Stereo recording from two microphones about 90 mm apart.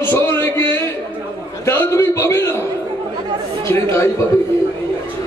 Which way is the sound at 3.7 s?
30° left (ahead or behind).